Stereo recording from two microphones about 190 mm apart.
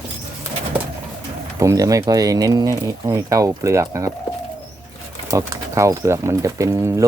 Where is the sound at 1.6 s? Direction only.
15° right (ahead or behind).